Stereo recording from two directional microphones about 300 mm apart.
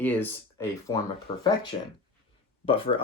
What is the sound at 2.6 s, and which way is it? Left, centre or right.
Speech, centre.